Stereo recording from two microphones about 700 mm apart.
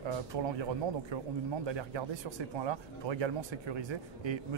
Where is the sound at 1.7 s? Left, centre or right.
Right.